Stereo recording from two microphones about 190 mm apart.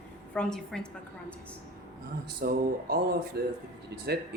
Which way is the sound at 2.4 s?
50° right (ahead or behind).